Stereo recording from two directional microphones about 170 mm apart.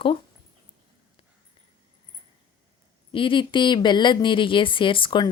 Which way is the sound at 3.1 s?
30° left (ahead or behind).